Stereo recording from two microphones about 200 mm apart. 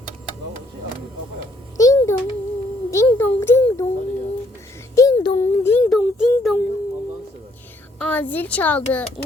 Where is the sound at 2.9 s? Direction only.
15° left (ahead or behind).